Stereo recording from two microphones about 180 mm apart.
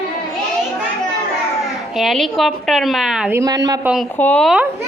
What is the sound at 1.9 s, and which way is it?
A woman's voice, centre (ahead or behind).